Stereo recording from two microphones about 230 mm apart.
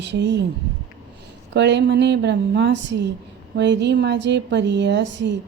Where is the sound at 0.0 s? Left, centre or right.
Right.